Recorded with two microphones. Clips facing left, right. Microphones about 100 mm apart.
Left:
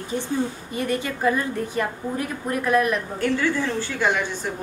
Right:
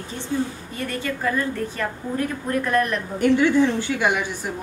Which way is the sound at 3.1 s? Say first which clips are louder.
Right 10 dB; 20° right (ahead or behind).